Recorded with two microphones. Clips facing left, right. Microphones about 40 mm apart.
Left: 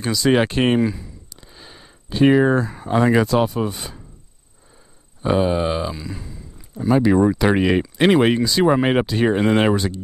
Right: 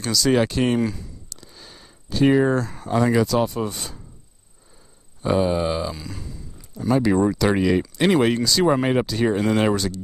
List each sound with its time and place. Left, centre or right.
0.0 s speech: left
0.7 s a sound: centre
2.9 s speech: left
3.4 s speech: centre
5.2 s speech: centre
7.3 s speech: left